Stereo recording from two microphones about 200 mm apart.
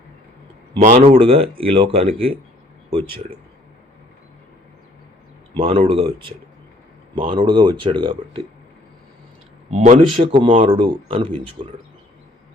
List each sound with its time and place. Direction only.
0.8 s speech: 35° right (ahead or behind)
5.5 s speech: 30° right (ahead or behind)
9.6 s speech: 30° right (ahead or behind)